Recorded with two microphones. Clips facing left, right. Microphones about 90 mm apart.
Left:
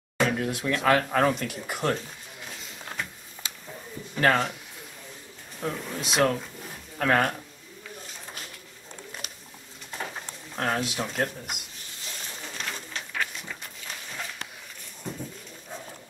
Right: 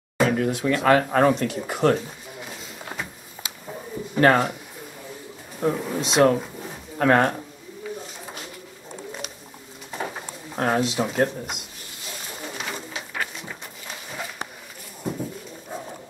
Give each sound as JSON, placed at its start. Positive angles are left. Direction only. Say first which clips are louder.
{"t": 0.2, "sound": "speech", "louder": "right 5 dB", "side_deg": 0}
{"t": 2.5, "sound": "a sound", "louder": "right 1 dB", "side_deg": -5}
{"t": 4.2, "sound": "a man's voice", "louder": "right 5 dB", "side_deg": -10}
{"t": 5.6, "sound": "a man's voice", "louder": "right 8 dB", "side_deg": -10}
{"t": 5.9, "sound": "speech", "louder": "right 5 dB", "side_deg": 0}
{"t": 7.0, "sound": "a man's voice", "louder": "right 5 dB", "side_deg": -10}
{"t": 9.8, "sound": "pigeon", "louder": "right 5 dB", "side_deg": -10}
{"t": 10.8, "sound": "speech", "louder": "right 7 dB", "side_deg": 0}
{"t": 12.4, "sound": "a sound", "louder": "right 5 dB", "side_deg": -5}